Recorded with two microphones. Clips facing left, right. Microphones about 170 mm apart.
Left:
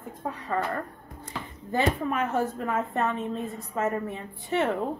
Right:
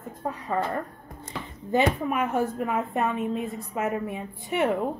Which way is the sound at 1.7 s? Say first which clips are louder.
Right 2 dB; 15° right (ahead or behind).